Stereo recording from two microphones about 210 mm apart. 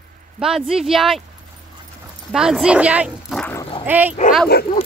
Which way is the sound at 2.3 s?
5° right (ahead or behind).